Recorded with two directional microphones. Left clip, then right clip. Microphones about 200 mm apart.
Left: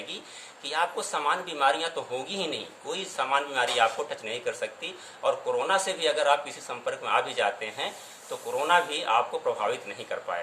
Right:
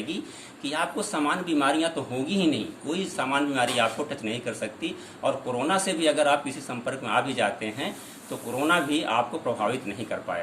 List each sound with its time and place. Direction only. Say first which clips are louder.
0.6 s a man's voice: even; 15° left (ahead or behind)